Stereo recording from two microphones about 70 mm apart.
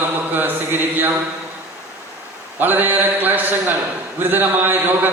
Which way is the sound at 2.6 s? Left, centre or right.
Right.